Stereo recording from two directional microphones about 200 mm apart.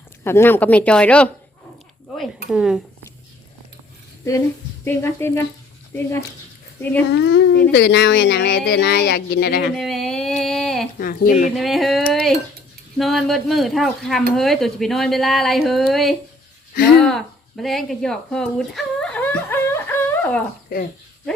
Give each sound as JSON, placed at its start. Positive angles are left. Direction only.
{"t": 0.3, "sound": "speech", "side_deg": 10}
{"t": 2.5, "sound": "speech", "side_deg": 0}
{"t": 4.9, "sound": "speech", "side_deg": 10}
{"t": 7.1, "sound": "speech", "side_deg": 60}
{"t": 9.7, "sound": "a sound", "side_deg": 0}
{"t": 11.0, "sound": "speech", "side_deg": 45}
{"t": 11.5, "sound": "speech", "side_deg": 0}
{"t": 17.0, "sound": "a sound", "side_deg": 0}